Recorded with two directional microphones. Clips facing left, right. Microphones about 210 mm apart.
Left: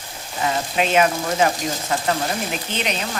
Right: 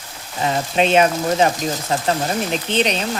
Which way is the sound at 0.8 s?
30° right (ahead or behind).